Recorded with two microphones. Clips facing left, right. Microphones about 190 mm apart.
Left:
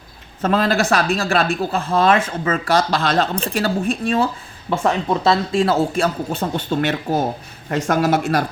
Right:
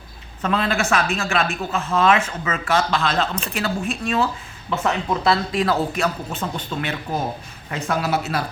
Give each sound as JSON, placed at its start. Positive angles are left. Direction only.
{"t": 0.4, "sound": "speech", "side_deg": 40}